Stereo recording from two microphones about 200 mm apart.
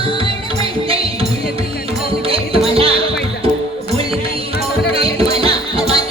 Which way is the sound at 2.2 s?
30° right (ahead or behind).